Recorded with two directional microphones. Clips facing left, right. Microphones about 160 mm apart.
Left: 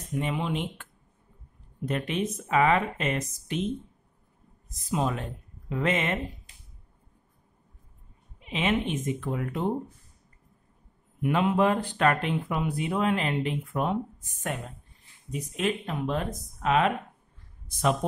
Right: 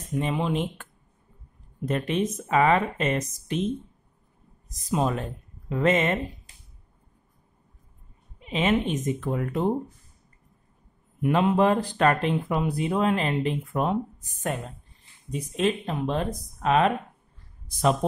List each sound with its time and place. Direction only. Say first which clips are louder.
0.2 s speech: right 3 dB; 35° right (ahead or behind)
1.9 s speech: right 3 dB; 35° right (ahead or behind)
4.9 s speech: right 3 dB; 40° right (ahead or behind)
8.4 s speech: right 3 dB; 35° right (ahead or behind)
11.1 s speech: right 3 dB; 40° right (ahead or behind)
15.3 s speech: right 4 dB; 30° right (ahead or behind)